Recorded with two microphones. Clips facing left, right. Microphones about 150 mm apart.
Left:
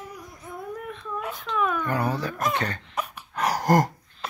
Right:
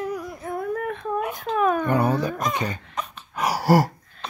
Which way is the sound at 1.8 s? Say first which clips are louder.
Right 5 dB; 25° right (ahead or behind).